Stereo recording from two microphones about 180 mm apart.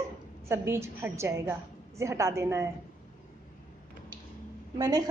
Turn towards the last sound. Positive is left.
turn(degrees=-20)  # may be behind; listen again after turning